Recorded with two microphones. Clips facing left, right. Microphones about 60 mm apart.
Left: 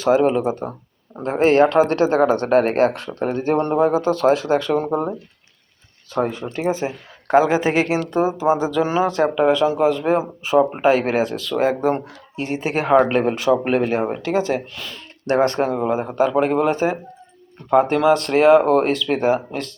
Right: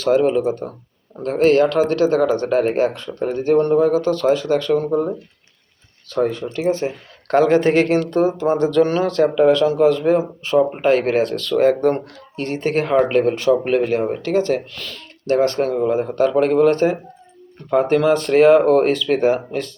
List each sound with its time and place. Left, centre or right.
0.0 s speech: centre
15.5 s speech: centre